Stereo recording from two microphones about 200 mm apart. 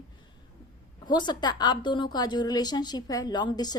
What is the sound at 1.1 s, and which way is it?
A woman's voice, 20° left (ahead or behind).